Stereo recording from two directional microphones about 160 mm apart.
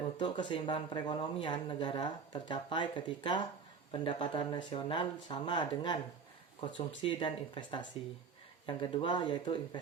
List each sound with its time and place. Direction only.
0.2 s speech: 30° left (ahead or behind)